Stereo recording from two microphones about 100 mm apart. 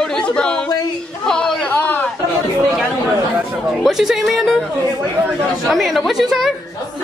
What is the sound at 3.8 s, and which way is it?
Speech, 5° right (ahead or behind).